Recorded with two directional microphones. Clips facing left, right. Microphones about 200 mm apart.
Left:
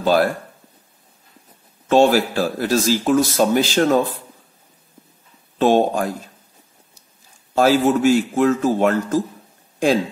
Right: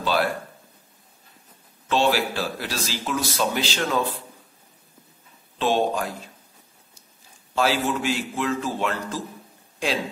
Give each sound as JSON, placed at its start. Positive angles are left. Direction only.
{"t": 0.0, "sound": "a sound", "side_deg": 45}
{"t": 1.9, "sound": "a man's voice", "side_deg": 45}
{"t": 5.6, "sound": "a man's voice", "side_deg": 45}
{"t": 7.5, "sound": "a man's voice", "side_deg": 45}